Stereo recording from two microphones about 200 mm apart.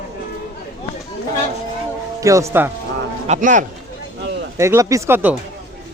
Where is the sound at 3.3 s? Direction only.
40° right (ahead or behind).